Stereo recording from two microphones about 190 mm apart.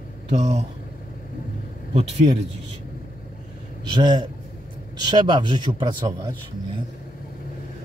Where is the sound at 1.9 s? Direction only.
35° right (ahead or behind).